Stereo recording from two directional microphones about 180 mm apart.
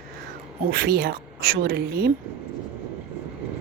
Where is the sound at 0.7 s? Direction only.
60° right (ahead or behind).